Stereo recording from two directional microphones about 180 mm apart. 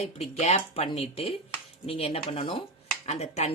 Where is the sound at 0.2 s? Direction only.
40° left (ahead or behind).